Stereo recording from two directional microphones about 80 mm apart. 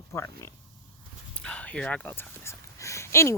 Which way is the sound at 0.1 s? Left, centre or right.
Left.